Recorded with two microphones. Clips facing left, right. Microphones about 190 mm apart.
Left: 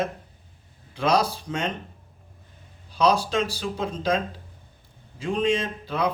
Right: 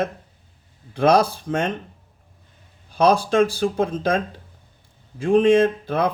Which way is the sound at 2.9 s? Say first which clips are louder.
Right 5 dB; 50° right (ahead or behind).